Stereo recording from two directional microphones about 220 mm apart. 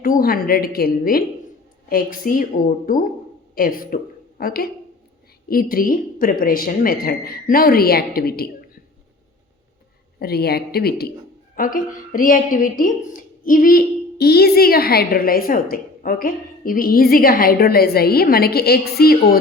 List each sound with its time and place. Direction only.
0.0 s a woman's voice: 40° left (ahead or behind)
10.2 s a woman's voice: 45° left (ahead or behind)